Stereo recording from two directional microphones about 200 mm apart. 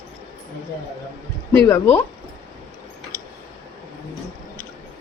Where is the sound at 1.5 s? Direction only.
15° left (ahead or behind).